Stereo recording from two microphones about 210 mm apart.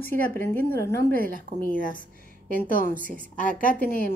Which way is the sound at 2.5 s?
40° left (ahead or behind).